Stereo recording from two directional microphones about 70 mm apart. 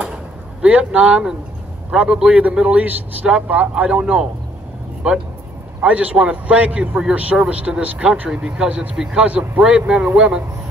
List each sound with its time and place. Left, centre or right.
0.6 s a man's voice: centre
5.8 s a man's voice: centre